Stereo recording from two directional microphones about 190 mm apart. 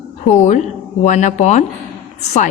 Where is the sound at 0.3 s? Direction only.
40° left (ahead or behind).